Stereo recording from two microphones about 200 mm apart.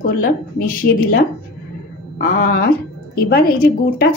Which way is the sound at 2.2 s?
50° left (ahead or behind).